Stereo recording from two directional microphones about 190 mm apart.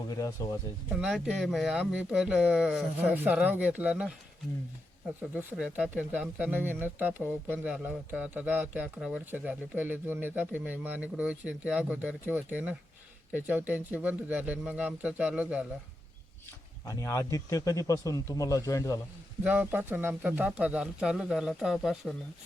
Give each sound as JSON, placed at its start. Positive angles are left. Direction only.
{"t": 0.1, "sound": "speech", "side_deg": 20}
{"t": 0.9, "sound": "speech", "side_deg": -5}
{"t": 5.2, "sound": "speech", "side_deg": -10}
{"t": 16.8, "sound": "speech", "side_deg": 15}
{"t": 19.5, "sound": "speech", "side_deg": -10}